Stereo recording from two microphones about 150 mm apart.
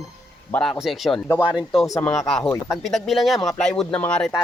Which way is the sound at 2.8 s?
Centre (ahead or behind).